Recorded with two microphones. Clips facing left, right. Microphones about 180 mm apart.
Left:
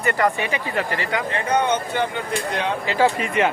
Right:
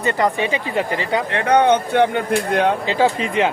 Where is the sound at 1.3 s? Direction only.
70° right (ahead or behind).